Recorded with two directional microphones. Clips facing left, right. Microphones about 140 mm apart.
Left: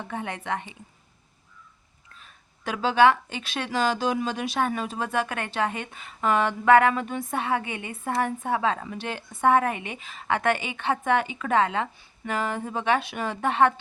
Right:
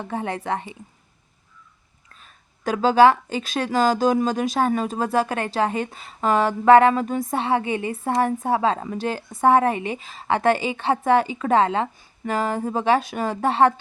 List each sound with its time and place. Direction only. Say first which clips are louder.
0.0 s speech: right 5 dB; 35° right (ahead or behind)
2.6 s speech: right 4 dB; 40° right (ahead or behind)